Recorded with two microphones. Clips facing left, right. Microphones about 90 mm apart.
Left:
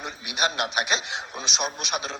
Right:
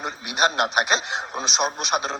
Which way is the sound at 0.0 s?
40° right (ahead or behind).